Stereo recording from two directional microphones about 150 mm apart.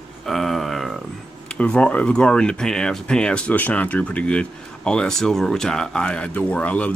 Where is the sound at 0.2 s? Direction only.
Centre (ahead or behind).